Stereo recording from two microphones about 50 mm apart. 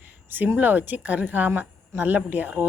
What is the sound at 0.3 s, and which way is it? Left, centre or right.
Speech, right.